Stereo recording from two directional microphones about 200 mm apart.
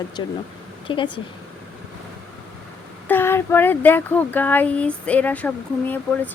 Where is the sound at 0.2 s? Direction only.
20° left (ahead or behind).